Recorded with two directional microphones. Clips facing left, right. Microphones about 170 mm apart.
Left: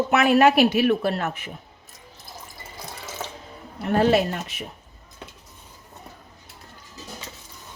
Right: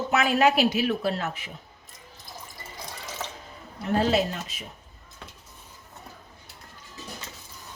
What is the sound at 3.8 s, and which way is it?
Speech, 60° left (ahead or behind).